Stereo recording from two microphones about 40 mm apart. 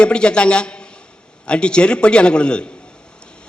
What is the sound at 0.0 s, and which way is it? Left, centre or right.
A man's voice, left.